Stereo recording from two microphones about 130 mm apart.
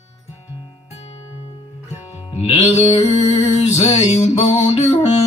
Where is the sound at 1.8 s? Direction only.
15° right (ahead or behind).